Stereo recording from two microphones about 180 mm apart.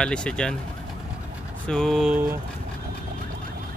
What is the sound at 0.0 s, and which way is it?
Speech, 5° left (ahead or behind).